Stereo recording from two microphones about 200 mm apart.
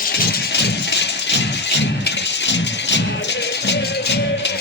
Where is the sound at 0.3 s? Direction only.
55° left (ahead or behind).